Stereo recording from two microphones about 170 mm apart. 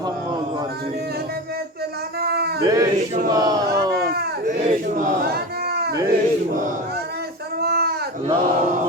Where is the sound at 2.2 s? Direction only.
70° right (ahead or behind).